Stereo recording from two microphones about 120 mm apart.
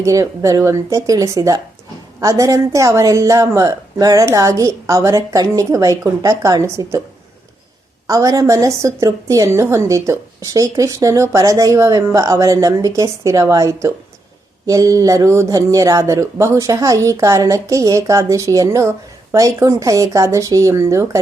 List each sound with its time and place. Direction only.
0.0 s speech: 30° right (ahead or behind)
8.0 s speech: 30° right (ahead or behind)